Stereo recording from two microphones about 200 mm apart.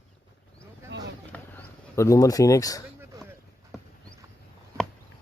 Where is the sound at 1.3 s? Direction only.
5° left (ahead or behind).